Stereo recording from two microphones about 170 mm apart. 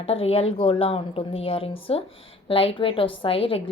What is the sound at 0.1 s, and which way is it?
A woman's voice, 35° left (ahead or behind).